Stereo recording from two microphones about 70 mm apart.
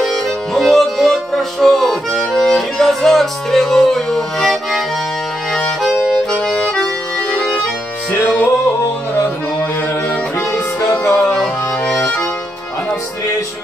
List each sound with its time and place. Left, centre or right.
0.0 s music: centre
5.5 s accordion: centre
6.3 s accordion: centre
10.8 s music: left
11.3 s accordion: centre